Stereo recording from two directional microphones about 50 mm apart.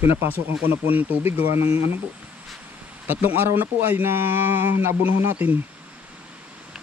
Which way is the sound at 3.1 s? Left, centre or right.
Right.